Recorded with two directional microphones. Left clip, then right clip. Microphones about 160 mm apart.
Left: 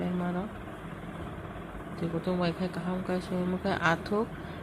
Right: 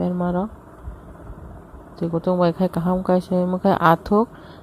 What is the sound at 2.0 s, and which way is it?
Speech, 60° right (ahead or behind).